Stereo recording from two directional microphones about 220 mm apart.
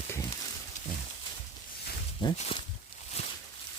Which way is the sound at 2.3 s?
30° left (ahead or behind).